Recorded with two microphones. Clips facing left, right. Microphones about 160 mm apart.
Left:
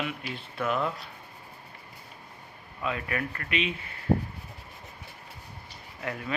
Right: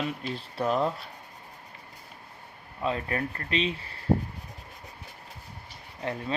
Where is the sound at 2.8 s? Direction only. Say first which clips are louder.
Right 2 dB; 30° right (ahead or behind).